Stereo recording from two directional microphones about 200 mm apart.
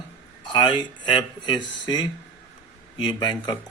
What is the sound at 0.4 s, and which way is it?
Speech, 20° left (ahead or behind).